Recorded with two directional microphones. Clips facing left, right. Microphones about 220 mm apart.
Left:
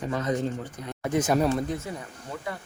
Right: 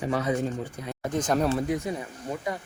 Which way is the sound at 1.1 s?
5° left (ahead or behind).